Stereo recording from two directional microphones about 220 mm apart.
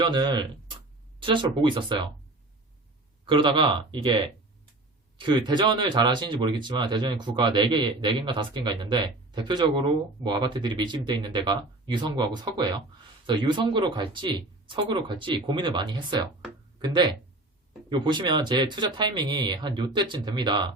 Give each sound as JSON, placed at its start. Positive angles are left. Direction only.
{"t": 0.0, "sound": "speech", "side_deg": -20}
{"t": 3.2, "sound": "speech", "side_deg": -20}